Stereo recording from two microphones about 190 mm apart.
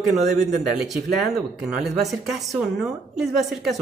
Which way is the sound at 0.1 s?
Centre (ahead or behind).